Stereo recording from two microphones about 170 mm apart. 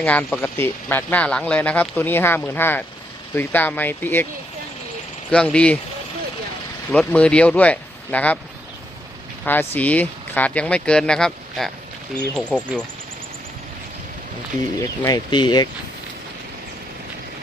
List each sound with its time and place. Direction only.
0.0 s speech: 10° left (ahead or behind)
5.3 s speech: 5° left (ahead or behind)
6.9 s speech: 5° left (ahead or behind)
9.4 s speech: 10° left (ahead or behind)
15.0 s speech: 25° left (ahead or behind)